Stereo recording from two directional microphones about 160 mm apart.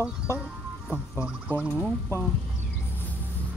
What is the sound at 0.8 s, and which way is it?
Speech, 10° right (ahead or behind).